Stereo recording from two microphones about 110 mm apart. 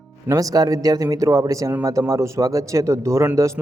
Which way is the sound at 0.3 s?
35° right (ahead or behind).